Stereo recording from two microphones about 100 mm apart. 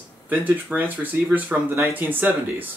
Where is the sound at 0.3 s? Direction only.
15° right (ahead or behind).